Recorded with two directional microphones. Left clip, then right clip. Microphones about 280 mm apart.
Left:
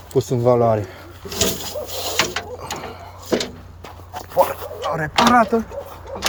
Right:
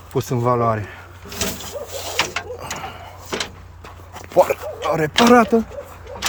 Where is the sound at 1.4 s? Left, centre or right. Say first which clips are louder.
Left 4 dB; left.